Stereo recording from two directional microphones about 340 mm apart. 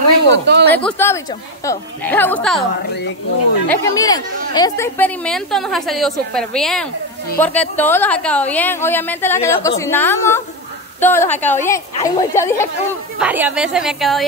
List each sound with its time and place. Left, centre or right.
0.3 s speech: right
0.7 s a woman's voice: centre
3.6 s a woman's voice: centre
13.2 s speech: centre